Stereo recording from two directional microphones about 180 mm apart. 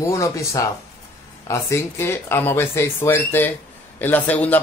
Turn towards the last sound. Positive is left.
turn(degrees=10)  # may be behind; listen again after turning